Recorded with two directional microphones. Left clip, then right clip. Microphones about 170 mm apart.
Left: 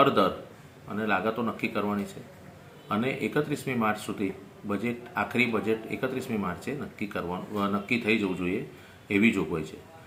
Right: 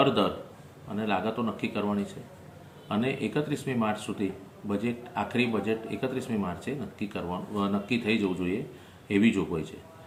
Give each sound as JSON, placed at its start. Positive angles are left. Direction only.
{"t": 0.0, "sound": "speech", "side_deg": 0}